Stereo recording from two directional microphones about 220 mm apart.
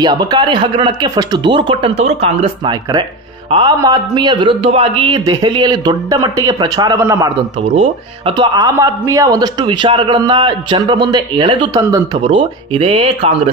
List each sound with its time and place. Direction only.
0.0 s speech: 20° right (ahead or behind)